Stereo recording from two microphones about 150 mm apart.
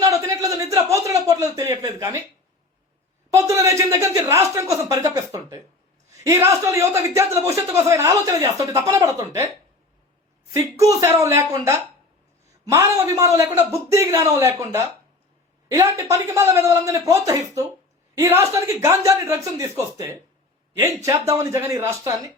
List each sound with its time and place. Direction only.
0.0 s a sound: 20° right (ahead or behind)
3.3 s speech: 20° right (ahead or behind)
10.5 s speech: 20° right (ahead or behind)